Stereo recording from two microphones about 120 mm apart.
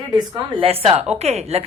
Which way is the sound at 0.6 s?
55° right (ahead or behind).